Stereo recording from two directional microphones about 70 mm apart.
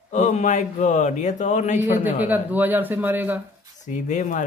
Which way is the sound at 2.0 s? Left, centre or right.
Right.